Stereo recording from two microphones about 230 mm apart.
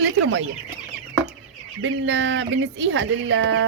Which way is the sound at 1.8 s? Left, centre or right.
Right.